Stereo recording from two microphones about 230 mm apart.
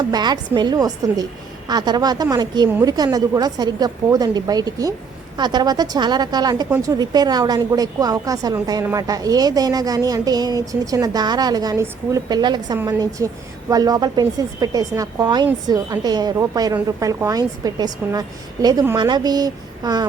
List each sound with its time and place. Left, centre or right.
0.1 s a woman's voice: centre